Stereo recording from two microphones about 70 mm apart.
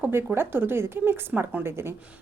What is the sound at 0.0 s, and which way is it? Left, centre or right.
Speech, right.